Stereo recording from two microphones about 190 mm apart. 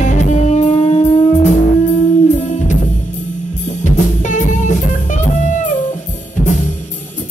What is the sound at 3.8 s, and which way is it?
Music, 40° left (ahead or behind).